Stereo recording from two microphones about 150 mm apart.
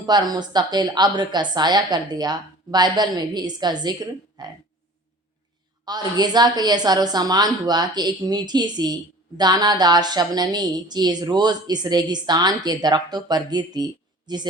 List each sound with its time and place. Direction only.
0.0 s a woman's voice: 30° right (ahead or behind)
5.8 s a woman's voice: 25° right (ahead or behind)